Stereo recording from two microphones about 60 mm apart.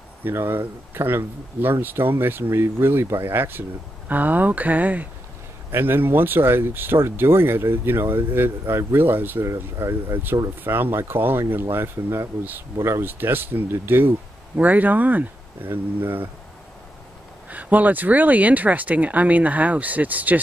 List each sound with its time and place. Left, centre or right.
0.2 s speech: right
5.7 s speech: right
9.5 s speech: right
10.6 s speech: right
17.5 s speech: right